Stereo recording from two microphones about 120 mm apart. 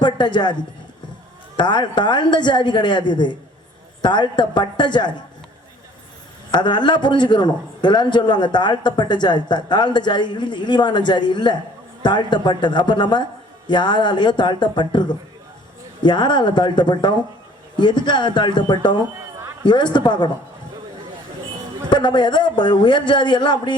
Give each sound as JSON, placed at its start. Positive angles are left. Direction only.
{"t": 0.0, "sound": "a man's voice", "side_deg": 40}
{"t": 1.5, "sound": "a man's voice", "side_deg": 40}
{"t": 6.5, "sound": "a man's voice", "side_deg": 40}
{"t": 16.0, "sound": "a man's voice", "side_deg": 40}
{"t": 21.8, "sound": "a man's voice", "side_deg": 40}